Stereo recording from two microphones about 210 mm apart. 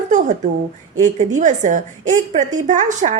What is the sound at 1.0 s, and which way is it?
A woman's voice, 35° right (ahead or behind).